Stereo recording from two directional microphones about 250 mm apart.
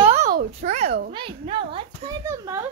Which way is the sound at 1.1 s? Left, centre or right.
Right.